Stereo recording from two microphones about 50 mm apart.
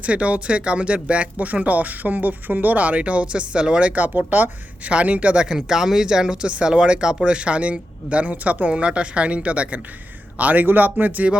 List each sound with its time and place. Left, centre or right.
0.0 s speech: right
4.0 s speech: right
5.5 s speech: centre; by 8.7 s right
8.7 s speech: right